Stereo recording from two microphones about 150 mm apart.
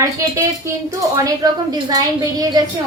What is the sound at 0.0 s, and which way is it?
A woman's voice, 20° right (ahead or behind).